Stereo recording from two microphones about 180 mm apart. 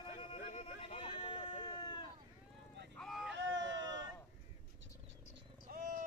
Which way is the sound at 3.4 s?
90° right.